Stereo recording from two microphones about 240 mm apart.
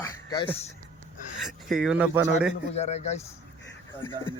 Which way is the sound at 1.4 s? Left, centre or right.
Centre.